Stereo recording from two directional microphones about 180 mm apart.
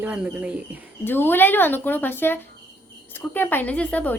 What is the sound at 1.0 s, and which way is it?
A woman's voice, 10° left (ahead or behind).